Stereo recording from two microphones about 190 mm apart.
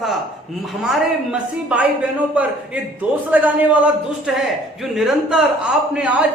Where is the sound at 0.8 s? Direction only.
5° right (ahead or behind).